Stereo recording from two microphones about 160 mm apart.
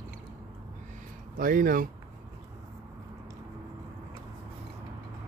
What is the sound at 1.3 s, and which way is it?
Speech, 60° right (ahead or behind).